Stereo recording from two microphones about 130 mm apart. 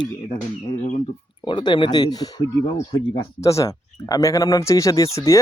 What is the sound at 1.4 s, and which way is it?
Speech, 40° left (ahead or behind).